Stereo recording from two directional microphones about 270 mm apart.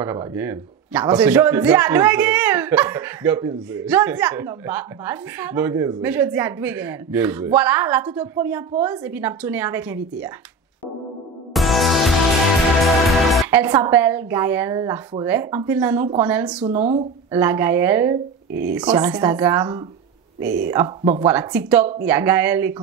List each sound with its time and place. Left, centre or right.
0.0 s a man's voice: centre
11.5 s music: centre
12.8 s a man's voice: centre
18.5 s speech: right
18.8 s a man's voice: centre